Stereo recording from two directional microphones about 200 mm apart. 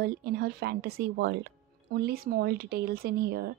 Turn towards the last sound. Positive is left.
turn(degrees=-50)  # may be behind; listen again after turning